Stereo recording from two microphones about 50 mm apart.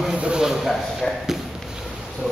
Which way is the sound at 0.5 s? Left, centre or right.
Centre.